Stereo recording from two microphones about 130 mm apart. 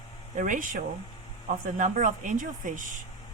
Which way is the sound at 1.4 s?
75° right (ahead or behind).